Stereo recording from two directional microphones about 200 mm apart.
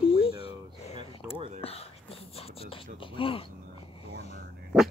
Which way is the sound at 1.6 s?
30° left (ahead or behind).